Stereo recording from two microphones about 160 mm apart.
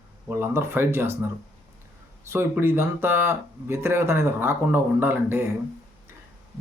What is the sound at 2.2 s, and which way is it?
Speech, 15° right (ahead or behind).